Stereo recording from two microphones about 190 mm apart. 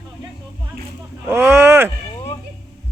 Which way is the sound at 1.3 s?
15° right (ahead or behind).